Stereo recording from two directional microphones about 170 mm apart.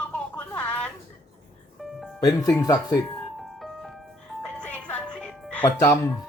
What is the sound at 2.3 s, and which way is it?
Speech, 20° left (ahead or behind).